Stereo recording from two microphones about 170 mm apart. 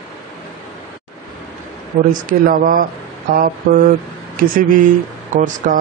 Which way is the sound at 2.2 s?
55° right (ahead or behind).